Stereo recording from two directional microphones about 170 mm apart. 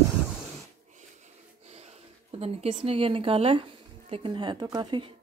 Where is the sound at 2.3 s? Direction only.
35° right (ahead or behind).